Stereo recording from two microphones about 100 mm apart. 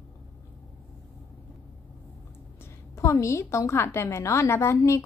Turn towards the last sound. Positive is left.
turn(degrees=30)  # may be behind; listen again after turning